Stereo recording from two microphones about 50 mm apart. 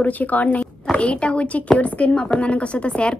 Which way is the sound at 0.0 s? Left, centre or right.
Left.